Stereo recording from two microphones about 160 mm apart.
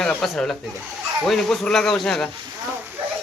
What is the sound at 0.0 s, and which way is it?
Speech, 5° left (ahead or behind).